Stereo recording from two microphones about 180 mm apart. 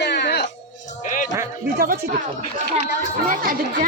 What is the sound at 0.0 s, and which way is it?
Music, 70° left (ahead or behind).